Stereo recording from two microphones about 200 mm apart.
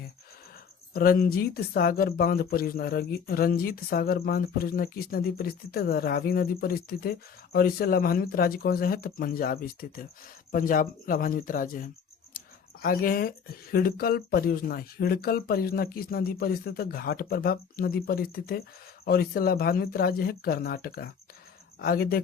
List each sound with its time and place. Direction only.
0.9 s speech: 45° left (ahead or behind)
12.4 s a sound: 45° left (ahead or behind)
12.8 s speech: 45° left (ahead or behind)